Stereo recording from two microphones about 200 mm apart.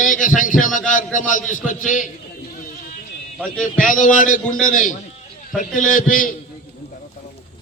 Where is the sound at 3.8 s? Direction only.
40° left (ahead or behind).